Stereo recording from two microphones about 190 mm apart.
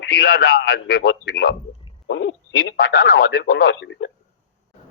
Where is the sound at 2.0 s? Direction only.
70° left (ahead or behind).